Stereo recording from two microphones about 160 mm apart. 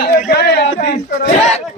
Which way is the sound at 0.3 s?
85° left.